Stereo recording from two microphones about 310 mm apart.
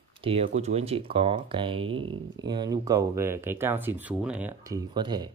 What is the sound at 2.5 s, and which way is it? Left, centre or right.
Speech, centre.